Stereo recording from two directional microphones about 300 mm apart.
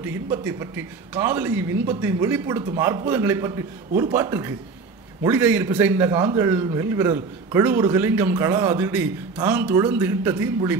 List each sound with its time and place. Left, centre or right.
0.3 s a man's voice: centre